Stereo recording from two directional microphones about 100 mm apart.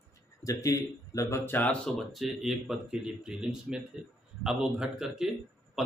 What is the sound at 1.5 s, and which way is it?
Speech, 15° left (ahead or behind).